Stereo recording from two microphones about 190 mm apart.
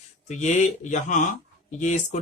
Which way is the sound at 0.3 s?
40° left (ahead or behind).